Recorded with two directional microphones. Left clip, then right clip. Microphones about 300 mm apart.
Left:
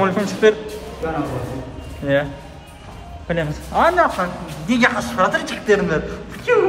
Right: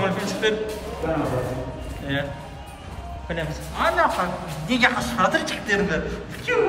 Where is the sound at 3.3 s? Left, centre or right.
Centre.